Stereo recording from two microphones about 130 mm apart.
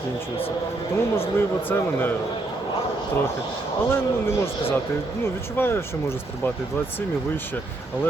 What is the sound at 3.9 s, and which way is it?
Speech, 20° left (ahead or behind).